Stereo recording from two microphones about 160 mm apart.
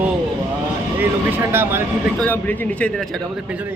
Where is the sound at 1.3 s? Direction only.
15° right (ahead or behind).